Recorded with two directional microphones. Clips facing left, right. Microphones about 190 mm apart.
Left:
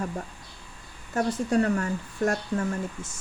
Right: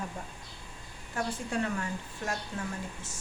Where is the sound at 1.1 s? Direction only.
45° left (ahead or behind).